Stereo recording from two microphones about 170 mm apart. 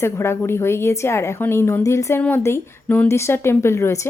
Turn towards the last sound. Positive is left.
turn(degrees=15)  # may be behind; listen again after turning